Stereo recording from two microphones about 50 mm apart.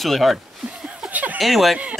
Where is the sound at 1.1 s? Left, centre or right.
Right.